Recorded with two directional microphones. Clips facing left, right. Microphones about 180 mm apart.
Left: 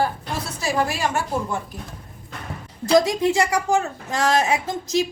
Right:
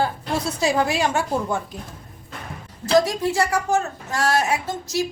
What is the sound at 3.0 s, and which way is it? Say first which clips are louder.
A woman's voice: left 2 dB; 20° left (ahead or behind).